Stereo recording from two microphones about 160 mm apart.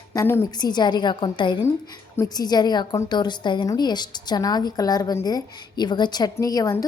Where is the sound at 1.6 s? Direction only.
20° left (ahead or behind).